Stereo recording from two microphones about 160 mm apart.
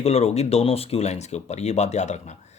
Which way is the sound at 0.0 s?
40° left (ahead or behind).